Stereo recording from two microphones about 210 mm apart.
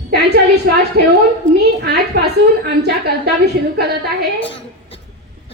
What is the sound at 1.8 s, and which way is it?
A woman's voice, 50° right (ahead or behind).